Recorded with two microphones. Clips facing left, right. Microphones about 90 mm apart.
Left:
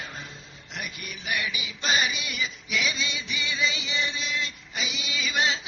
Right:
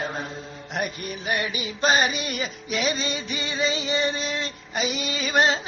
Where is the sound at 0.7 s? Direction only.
40° right (ahead or behind).